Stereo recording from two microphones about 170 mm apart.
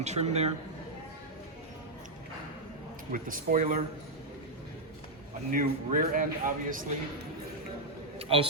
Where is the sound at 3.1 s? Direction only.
55° right (ahead or behind).